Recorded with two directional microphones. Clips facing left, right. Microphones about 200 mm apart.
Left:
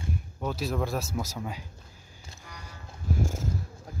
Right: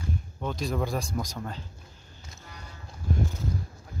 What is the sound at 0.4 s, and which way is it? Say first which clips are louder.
A man's voice: even; 5° left (ahead or behind).